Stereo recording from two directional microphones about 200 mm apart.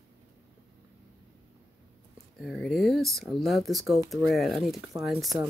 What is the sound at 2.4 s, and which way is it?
Speech, centre (ahead or behind).